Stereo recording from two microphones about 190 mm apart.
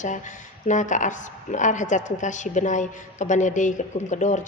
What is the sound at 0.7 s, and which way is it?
A woman's voice, 40° left (ahead or behind).